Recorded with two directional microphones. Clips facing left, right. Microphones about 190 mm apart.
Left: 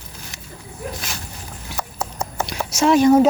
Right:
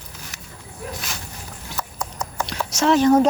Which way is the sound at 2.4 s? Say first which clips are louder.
Left 2 dB; 10° left (ahead or behind).